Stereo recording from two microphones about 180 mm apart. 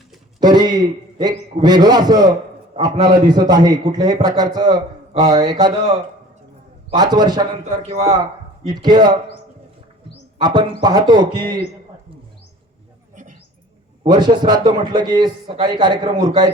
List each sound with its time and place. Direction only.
0.3 s a man's voice: 20° right (ahead or behind)
7.8 s a man's voice: 35° right (ahead or behind)
10.3 s a man's voice: 25° right (ahead or behind)
14.0 s a man's voice: 25° right (ahead or behind)